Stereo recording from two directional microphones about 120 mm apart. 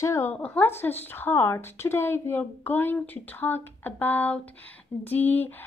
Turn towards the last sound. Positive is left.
turn(degrees=15)  # may be behind; listen again after turning